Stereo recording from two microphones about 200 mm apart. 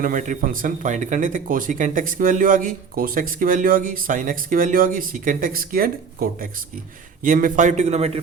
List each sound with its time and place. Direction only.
0.0 s a man's voice: 40° right (ahead or behind)